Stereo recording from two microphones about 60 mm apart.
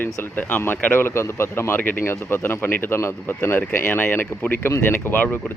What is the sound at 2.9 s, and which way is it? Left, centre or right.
Speech, left.